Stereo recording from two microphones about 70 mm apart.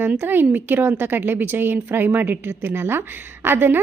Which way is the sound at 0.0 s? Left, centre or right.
Right.